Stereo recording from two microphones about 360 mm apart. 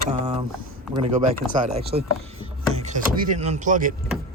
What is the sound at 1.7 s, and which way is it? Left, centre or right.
Speech, centre.